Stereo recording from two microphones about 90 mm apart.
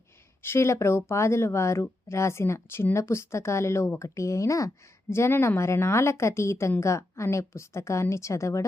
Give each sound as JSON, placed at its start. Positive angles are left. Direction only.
{"t": 0.4, "sound": "speech", "side_deg": 30}